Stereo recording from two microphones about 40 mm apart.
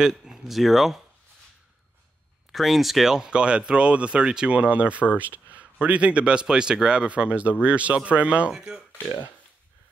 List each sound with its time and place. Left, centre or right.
0.2 s speech: centre
2.5 s speech: centre
3.2 s speech: right
4.6 s speech: right
8.5 s speech: centre